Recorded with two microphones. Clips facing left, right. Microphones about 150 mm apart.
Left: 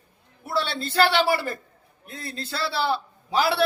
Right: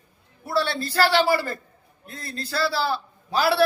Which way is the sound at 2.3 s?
25° left (ahead or behind).